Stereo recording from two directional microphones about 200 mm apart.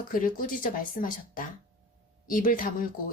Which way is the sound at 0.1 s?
45° left (ahead or behind).